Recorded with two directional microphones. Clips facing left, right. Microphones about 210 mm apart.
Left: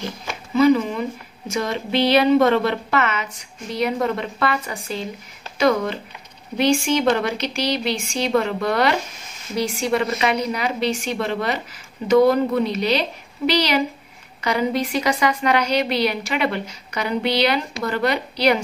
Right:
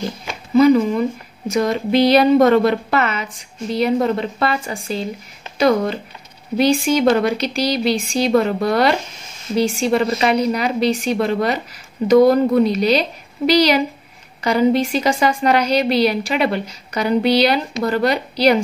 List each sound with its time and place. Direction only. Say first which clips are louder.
0.6 s a woman's voice: right 4 dB; 40° right (ahead or behind)
6.6 s a woman's voice: right 3 dB; 35° right (ahead or behind)